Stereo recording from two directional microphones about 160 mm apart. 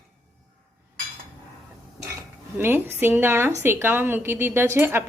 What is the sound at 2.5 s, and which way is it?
Speech, 15° right (ahead or behind).